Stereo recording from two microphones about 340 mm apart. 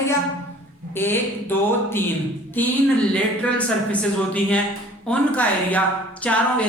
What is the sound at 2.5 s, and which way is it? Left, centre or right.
Speech, centre.